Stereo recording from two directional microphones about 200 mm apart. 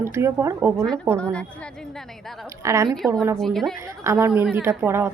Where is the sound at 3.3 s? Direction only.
Centre (ahead or behind).